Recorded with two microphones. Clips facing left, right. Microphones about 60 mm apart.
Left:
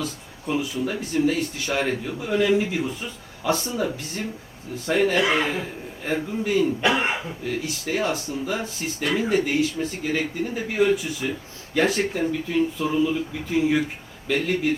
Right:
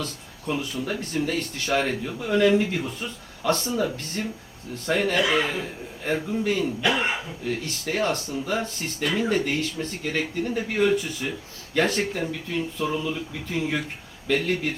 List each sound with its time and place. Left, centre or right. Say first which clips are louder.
0.0 s speech: left 2 dB; centre
5.2 s speech: left 1 dB; left
6.1 s speech: even; centre